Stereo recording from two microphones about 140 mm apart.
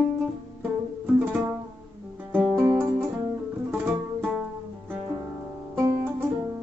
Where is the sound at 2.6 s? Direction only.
15° right (ahead or behind).